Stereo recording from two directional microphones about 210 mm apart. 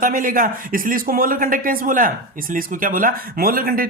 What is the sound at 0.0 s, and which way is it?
Speech, 40° right (ahead or behind).